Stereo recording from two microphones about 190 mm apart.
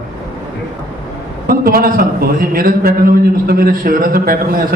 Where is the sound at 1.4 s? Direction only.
50° right (ahead or behind).